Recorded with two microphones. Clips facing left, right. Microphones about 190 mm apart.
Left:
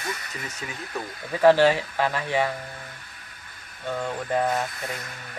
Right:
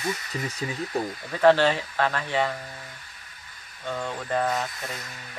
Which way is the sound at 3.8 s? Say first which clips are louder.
Left 2 dB; 10° left (ahead or behind).